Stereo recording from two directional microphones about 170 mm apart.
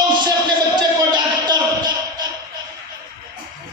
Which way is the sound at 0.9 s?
25° right (ahead or behind).